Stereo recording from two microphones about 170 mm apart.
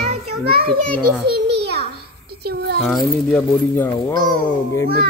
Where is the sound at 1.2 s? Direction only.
75° right (ahead or behind).